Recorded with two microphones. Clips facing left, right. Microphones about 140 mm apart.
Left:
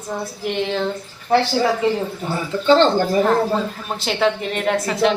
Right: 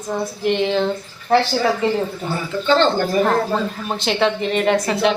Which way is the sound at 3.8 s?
5° left (ahead or behind).